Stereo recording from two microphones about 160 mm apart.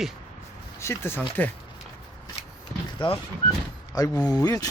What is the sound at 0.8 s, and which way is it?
Speech, 15° left (ahead or behind).